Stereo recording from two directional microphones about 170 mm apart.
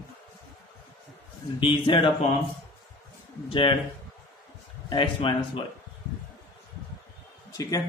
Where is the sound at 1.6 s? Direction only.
30° left (ahead or behind).